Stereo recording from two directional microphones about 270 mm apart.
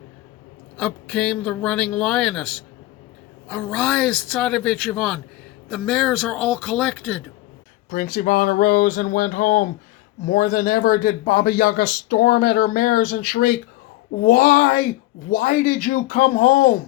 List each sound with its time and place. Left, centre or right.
0.8 s speech: centre
7.9 s speech: left